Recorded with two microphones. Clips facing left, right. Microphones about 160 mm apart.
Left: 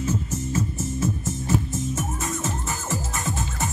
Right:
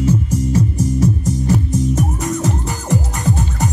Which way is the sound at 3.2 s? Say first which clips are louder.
Right 9 dB; 35° right (ahead or behind).